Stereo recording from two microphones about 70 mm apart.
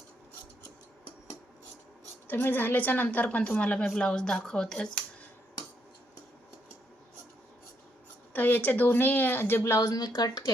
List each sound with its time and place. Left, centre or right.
2.2 s a woman's voice: left; by 4.9 s centre
8.3 s speech: left
9.9 s speech: left